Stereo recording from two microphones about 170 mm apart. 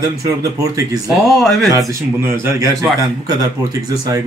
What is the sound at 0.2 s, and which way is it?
Speech, 20° right (ahead or behind).